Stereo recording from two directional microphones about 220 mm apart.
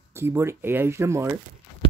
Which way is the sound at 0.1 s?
10° right (ahead or behind).